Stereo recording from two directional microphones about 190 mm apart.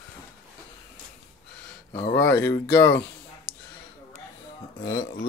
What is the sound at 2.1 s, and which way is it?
Speech, 15° left (ahead or behind).